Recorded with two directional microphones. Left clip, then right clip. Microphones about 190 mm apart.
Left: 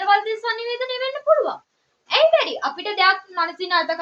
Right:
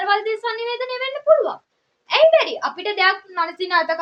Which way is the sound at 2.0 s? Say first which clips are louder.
Right 2 dB; 35° right (ahead or behind).